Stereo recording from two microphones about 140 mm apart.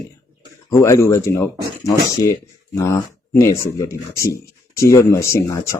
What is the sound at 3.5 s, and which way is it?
Speech, 20° left (ahead or behind).